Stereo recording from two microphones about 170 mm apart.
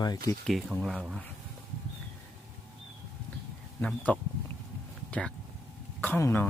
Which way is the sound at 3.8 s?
5° left (ahead or behind).